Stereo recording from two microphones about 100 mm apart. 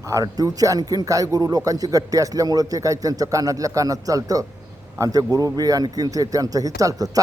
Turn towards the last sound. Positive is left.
turn(degrees=-35)  # may be behind; listen again after turning